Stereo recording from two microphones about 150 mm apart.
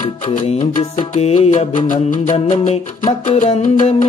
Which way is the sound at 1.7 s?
60° left (ahead or behind).